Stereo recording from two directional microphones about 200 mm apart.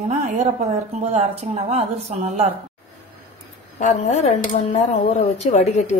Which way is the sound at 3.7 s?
35° left (ahead or behind).